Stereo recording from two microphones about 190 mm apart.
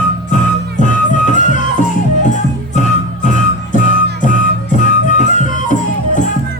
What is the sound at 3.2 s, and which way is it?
Music, 40° left (ahead or behind).